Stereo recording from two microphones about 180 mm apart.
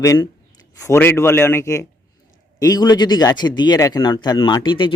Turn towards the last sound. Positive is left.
turn(degrees=25)  # may be behind; listen again after turning